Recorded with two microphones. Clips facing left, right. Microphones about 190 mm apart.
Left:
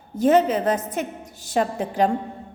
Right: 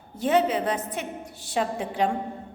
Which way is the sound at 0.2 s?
45° left (ahead or behind).